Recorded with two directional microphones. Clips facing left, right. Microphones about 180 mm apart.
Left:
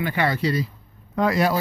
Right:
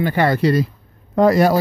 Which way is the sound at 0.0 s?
45° right (ahead or behind).